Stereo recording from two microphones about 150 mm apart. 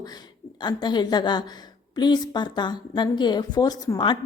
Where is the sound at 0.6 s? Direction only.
30° left (ahead or behind).